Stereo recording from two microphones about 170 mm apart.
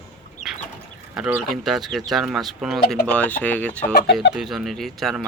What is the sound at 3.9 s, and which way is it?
Speech, 75° left (ahead or behind).